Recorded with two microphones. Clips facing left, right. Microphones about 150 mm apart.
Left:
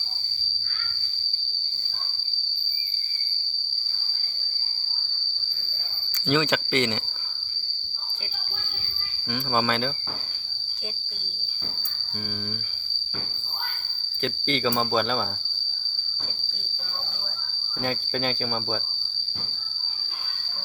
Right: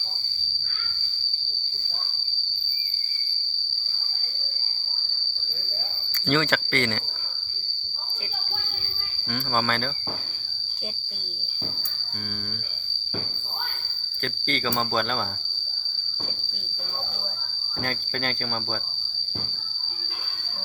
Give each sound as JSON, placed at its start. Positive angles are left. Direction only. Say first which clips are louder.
{"t": 6.2, "sound": "speech", "louder": "even", "side_deg": 15}
{"t": 9.3, "sound": "speech", "louder": "left 1 dB", "side_deg": 10}
{"t": 14.2, "sound": "speech", "louder": "left 3 dB", "side_deg": 15}
{"t": 17.8, "sound": "speech", "louder": "left 3 dB", "side_deg": 10}